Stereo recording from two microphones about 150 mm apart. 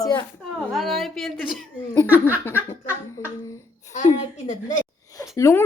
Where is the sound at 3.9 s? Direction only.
55° left (ahead or behind).